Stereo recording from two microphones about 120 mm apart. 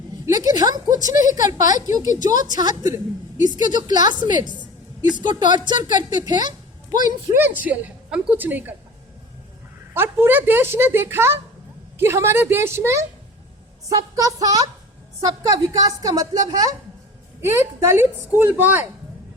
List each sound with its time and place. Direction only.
0.3 s a sound: 35° right (ahead or behind)
1.4 s a woman's voice: 30° right (ahead or behind)
7.3 s a woman's voice: 15° right (ahead or behind)
9.9 s a woman's voice: 20° right (ahead or behind)